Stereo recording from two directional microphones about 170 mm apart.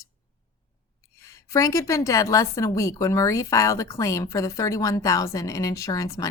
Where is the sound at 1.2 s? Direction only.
20° left (ahead or behind).